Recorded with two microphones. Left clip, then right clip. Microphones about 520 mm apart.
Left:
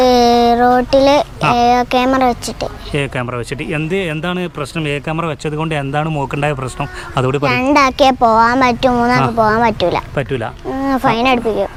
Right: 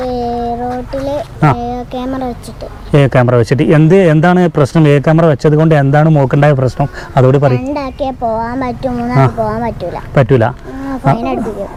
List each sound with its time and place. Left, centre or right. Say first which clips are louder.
0.0 s child singing: left 7 dB; left
1.5 s speech: left 8 dB; left
2.9 s speech: right 12 dB; right; by 7.4 s centre
7.5 s speech: left 6 dB; left
8.4 s speech: left 6 dB; left
10.2 s speech: right 9 dB; right